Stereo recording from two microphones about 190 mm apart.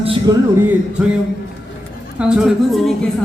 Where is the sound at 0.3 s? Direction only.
20° right (ahead or behind).